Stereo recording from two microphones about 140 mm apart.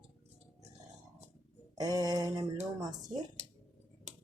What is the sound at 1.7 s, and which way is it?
Speech, 25° right (ahead or behind).